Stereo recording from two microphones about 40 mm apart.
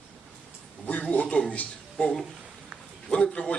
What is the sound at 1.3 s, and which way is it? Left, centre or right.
Speech, left.